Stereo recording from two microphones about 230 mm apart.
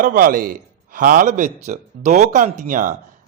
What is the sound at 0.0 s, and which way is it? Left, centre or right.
Speech, right.